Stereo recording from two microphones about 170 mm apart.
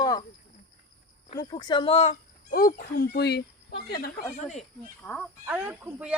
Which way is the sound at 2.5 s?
60° left (ahead or behind).